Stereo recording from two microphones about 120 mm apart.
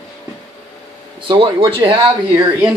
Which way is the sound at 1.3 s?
45° right (ahead or behind).